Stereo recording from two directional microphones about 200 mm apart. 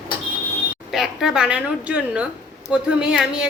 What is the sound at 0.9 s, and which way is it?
A woman's voice, centre (ahead or behind).